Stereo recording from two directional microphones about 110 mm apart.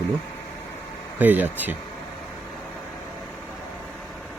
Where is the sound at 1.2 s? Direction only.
15° right (ahead or behind).